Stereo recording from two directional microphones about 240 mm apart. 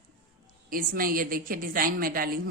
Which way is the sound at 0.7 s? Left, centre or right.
Right.